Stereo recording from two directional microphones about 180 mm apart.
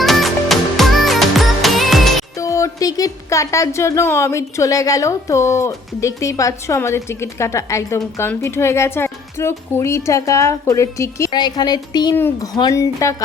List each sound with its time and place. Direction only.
0.0 s music: centre (ahead or behind)
2.4 s speech: 15° left (ahead or behind)
12.1 s speech: 10° left (ahead or behind)